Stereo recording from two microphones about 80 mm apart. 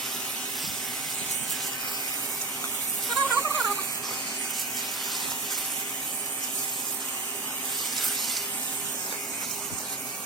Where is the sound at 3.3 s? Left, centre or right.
Left.